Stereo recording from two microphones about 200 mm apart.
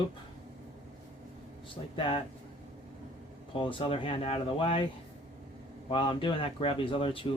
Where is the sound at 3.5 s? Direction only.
25° left (ahead or behind).